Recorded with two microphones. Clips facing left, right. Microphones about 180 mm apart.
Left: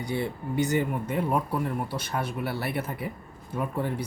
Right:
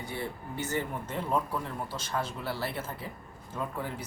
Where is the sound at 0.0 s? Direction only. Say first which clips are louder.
Left 7 dB; 15° left (ahead or behind).